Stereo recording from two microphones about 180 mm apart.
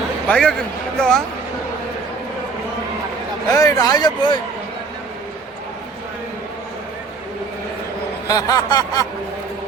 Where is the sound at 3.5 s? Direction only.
20° left (ahead or behind).